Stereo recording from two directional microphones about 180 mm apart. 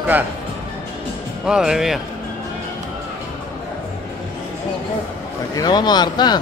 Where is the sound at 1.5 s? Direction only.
5° right (ahead or behind).